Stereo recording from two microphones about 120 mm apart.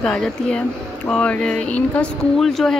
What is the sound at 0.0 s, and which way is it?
Speech, 5° left (ahead or behind).